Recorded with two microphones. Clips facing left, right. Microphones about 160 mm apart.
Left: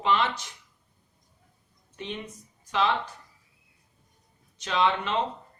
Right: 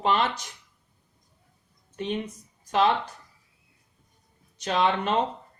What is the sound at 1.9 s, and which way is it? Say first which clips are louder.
Speech: right 7 dB; 45° right (ahead or behind).